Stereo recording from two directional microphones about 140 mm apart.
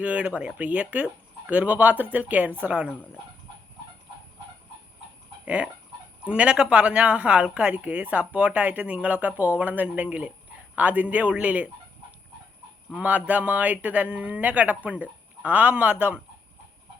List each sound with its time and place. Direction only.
0.0 s speech: 10° right (ahead or behind)
5.5 s speech: 10° right (ahead or behind)
12.9 s speech: 10° right (ahead or behind)